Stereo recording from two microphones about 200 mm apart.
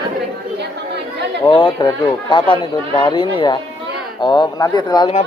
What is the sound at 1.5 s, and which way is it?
Speech, 25° left (ahead or behind).